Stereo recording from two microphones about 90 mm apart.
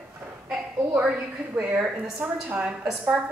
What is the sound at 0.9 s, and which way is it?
A woman's voice, 15° right (ahead or behind).